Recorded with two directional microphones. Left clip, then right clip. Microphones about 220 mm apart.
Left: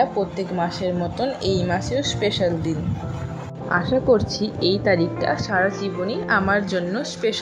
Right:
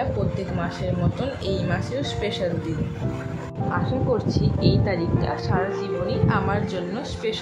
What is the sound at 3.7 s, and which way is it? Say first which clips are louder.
Speech: left 7 dB; 25° left (ahead or behind).